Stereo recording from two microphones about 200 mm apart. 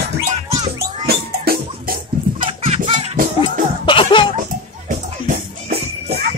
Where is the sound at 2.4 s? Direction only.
30° right (ahead or behind).